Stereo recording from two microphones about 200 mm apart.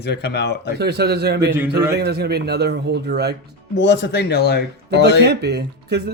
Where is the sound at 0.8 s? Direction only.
55° right (ahead or behind).